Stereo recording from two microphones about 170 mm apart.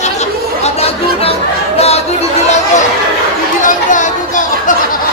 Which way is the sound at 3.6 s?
45° left (ahead or behind).